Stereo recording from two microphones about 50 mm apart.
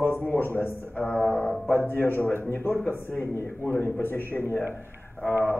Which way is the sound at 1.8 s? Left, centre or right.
Left.